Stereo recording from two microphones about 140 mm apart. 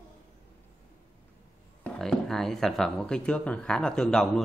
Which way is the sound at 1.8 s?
5° left (ahead or behind).